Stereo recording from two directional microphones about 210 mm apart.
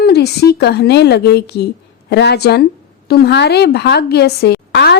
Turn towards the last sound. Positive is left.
turn(degrees=50)  # may be behind; listen again after turning